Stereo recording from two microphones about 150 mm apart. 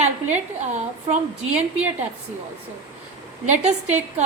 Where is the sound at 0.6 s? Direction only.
50° right (ahead or behind).